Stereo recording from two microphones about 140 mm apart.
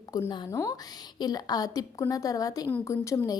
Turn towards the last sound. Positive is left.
turn(degrees=25)  # may be behind; listen again after turning